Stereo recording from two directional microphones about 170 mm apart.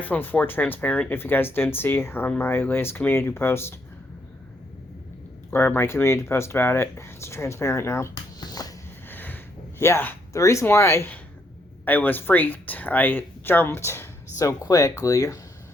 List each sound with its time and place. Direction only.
0.0 s speech: 10° left (ahead or behind)
5.5 s speech: 15° left (ahead or behind)
9.0 s a sound: 10° left (ahead or behind)
11.9 s speech: 10° left (ahead or behind)